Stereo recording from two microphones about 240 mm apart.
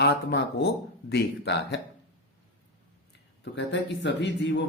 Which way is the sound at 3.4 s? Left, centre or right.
Left.